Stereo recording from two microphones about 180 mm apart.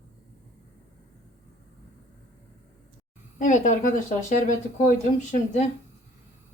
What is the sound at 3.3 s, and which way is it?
Speech, 45° left (ahead or behind).